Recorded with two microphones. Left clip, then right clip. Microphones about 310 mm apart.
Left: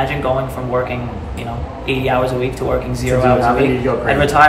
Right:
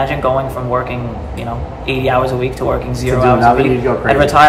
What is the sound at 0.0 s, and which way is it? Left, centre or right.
Speech, centre.